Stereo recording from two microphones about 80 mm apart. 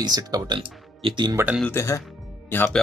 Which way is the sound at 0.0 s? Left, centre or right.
Right.